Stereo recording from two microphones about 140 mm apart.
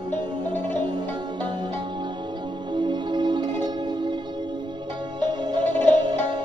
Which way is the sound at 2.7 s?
35° right (ahead or behind).